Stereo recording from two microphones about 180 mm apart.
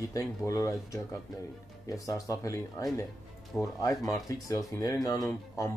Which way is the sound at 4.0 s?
20° left (ahead or behind).